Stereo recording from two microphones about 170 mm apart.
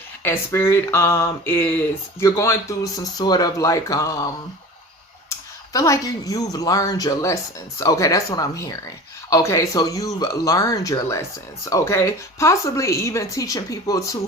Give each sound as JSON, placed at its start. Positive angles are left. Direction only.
{"t": 0.2, "sound": "speech", "side_deg": 15}
{"t": 5.3, "sound": "speech", "side_deg": 20}